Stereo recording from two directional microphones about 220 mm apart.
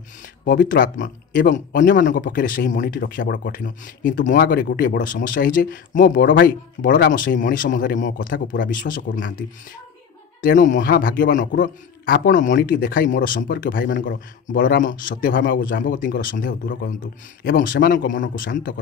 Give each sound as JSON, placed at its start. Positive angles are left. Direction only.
{"t": 0.2, "sound": "speech", "side_deg": 40}
{"t": 10.4, "sound": "speech", "side_deg": 35}